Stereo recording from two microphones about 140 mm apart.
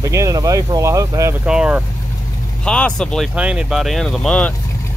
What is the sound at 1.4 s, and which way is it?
Speech, 5° right (ahead or behind).